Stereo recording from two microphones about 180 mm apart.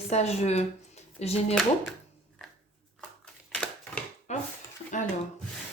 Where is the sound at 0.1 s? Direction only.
35° left (ahead or behind).